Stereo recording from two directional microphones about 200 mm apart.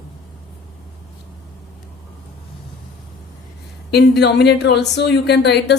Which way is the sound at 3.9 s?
55° left (ahead or behind).